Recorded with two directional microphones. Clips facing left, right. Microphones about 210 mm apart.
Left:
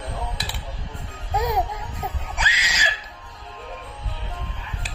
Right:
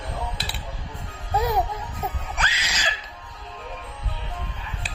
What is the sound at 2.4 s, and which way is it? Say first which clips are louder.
Screaming: left 1 dB; 10° left (ahead or behind).